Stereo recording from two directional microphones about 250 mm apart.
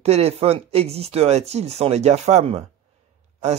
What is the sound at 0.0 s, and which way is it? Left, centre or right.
Speech, right.